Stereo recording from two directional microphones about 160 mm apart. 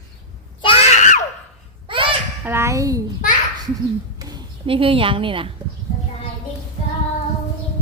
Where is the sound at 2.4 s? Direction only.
15° right (ahead or behind).